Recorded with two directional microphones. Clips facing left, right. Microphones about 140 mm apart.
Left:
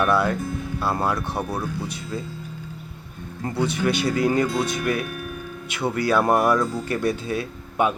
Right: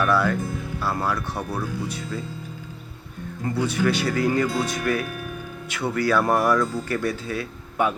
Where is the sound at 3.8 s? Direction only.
20° left (ahead or behind).